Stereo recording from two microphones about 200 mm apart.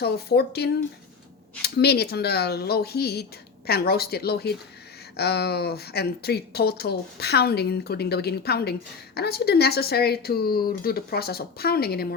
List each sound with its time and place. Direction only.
0.0 s speech: 55° left (ahead or behind)